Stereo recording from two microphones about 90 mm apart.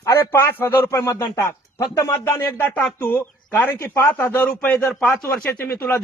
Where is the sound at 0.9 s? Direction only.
35° left (ahead or behind); by 4.9 s 20° left (ahead or behind).